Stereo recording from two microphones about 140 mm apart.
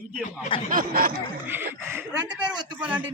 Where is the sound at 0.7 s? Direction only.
90° right.